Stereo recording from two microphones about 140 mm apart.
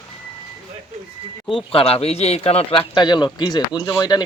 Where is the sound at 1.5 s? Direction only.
40° left (ahead or behind).